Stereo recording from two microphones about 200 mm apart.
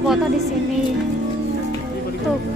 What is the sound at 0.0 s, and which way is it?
Speech, centre (ahead or behind).